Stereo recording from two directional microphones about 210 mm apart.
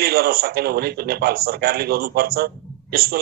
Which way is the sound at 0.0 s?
45° right (ahead or behind).